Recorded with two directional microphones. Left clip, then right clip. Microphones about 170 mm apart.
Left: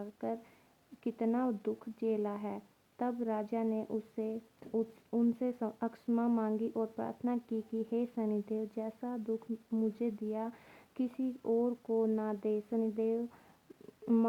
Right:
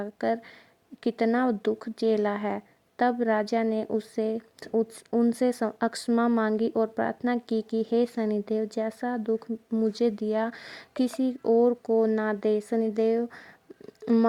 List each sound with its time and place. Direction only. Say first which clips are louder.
0.0 s a woman's voice: right 12 dB; 40° right (ahead or behind)
11.4 s a woman's voice: right 11 dB; 50° right (ahead or behind); by 14.3 s 30° right (ahead or behind)